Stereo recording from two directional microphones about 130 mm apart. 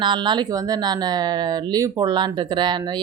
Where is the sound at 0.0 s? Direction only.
35° right (ahead or behind).